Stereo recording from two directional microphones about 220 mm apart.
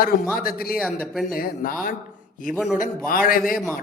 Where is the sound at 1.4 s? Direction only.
40° left (ahead or behind).